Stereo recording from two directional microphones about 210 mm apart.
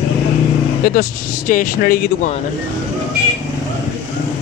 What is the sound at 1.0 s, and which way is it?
Speech, 40° left (ahead or behind).